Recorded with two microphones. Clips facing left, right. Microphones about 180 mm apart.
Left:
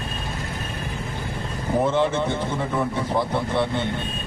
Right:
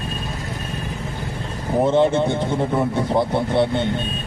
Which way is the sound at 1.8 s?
25° right (ahead or behind).